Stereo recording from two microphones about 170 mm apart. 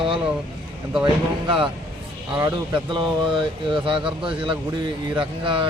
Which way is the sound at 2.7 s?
30° right (ahead or behind).